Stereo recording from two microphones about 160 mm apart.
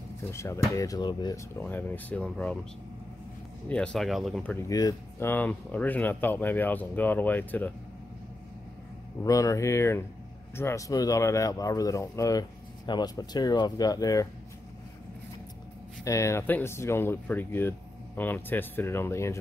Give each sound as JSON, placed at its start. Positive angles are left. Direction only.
{"t": 0.3, "sound": "speech", "side_deg": 20}
{"t": 1.6, "sound": "speech", "side_deg": 10}
{"t": 3.6, "sound": "speech", "side_deg": 5}
{"t": 4.6, "sound": "speech", "side_deg": 20}
{"t": 9.2, "sound": "speech", "side_deg": 20}
{"t": 16.0, "sound": "speech", "side_deg": 20}